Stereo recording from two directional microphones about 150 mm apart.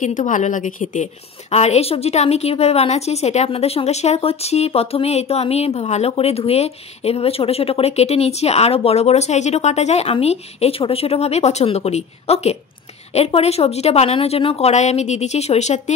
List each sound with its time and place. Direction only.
0.0 s a woman's voice: 55° left (ahead or behind)